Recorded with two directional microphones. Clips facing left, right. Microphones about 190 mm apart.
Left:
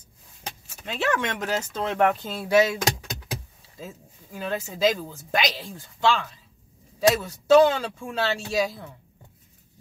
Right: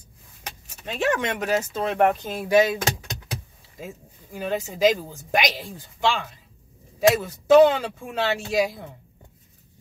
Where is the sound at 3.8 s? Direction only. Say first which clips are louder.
Right 2 dB; 15° right (ahead or behind).